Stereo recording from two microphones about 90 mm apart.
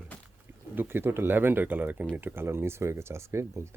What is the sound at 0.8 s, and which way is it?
Speech, 25° right (ahead or behind).